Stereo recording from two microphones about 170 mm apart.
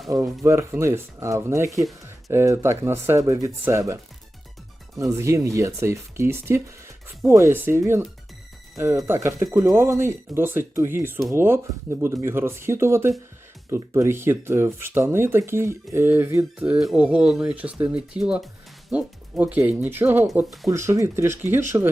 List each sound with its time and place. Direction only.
0.1 s speech: 20° right (ahead or behind)
1.8 s a sound: centre (ahead or behind)
2.3 s speech: 15° right (ahead or behind)
4.9 s speech: 15° right (ahead or behind)